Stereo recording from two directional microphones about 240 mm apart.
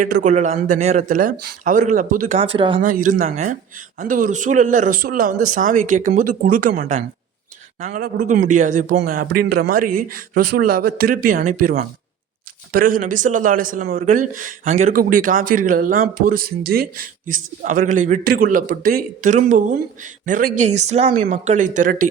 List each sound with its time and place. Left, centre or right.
0.0 s a man's voice: right
2.4 s speech: right
2.8 s a man's voice: right